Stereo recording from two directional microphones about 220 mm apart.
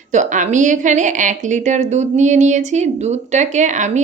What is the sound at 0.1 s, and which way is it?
A woman's voice, 35° right (ahead or behind).